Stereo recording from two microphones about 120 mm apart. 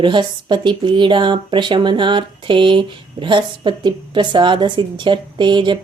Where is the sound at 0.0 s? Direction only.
40° right (ahead or behind).